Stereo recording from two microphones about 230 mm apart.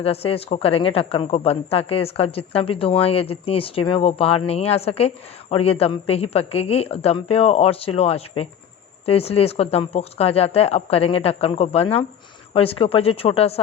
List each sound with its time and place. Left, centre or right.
0.0 s speech: left